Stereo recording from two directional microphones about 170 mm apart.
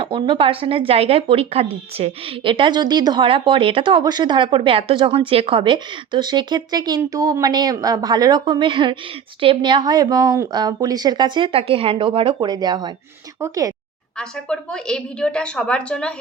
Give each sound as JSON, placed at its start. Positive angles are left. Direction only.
{"t": 0.0, "sound": "speech", "side_deg": -30}
{"t": 14.2, "sound": "a woman's voice", "side_deg": 5}